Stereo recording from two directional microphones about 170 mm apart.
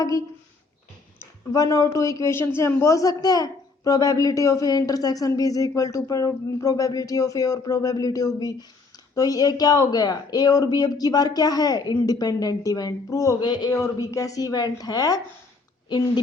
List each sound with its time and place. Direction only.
0.0 s speech: 20° left (ahead or behind)